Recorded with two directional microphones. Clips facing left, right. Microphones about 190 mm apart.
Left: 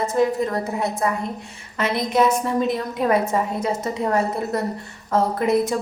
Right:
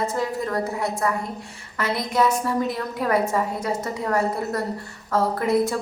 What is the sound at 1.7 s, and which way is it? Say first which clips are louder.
A woman's voice: left 3 dB; 20° left (ahead or behind).